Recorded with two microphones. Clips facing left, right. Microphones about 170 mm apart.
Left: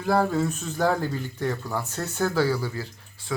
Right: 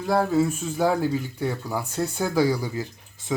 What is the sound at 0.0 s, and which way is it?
Speech, 5° right (ahead or behind).